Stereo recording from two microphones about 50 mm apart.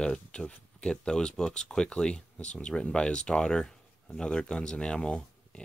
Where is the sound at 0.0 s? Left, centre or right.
Centre.